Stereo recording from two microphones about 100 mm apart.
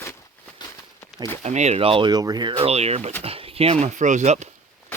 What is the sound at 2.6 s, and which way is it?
Speech, 90° right.